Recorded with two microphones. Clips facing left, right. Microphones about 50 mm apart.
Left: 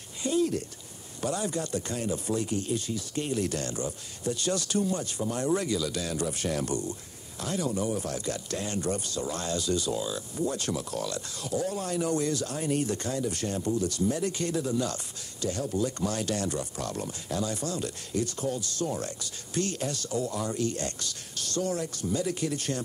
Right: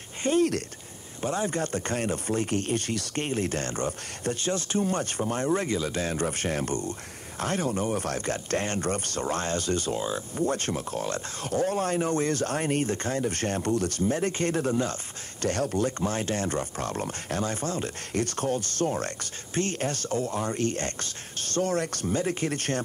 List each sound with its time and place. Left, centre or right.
0.2 s speech: right
1.2 s speech: right
3.3 s speech: right
4.4 s speech: right
4.8 s speech: right
15.4 s speech: right
16.0 s speech: right
18.1 s speech: right
22.1 s speech: right